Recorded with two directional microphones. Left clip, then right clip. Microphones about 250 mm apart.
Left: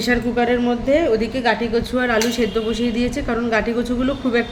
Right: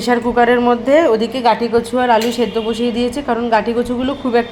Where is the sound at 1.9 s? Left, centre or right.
Centre.